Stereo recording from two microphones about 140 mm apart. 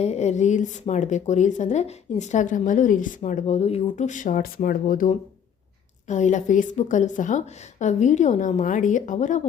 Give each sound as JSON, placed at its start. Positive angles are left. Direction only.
{"t": 0.0, "sound": "speech", "side_deg": 50}
{"t": 6.1, "sound": "speech", "side_deg": 60}